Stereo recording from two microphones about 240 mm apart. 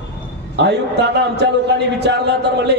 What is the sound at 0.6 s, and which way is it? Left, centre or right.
A man's voice, right.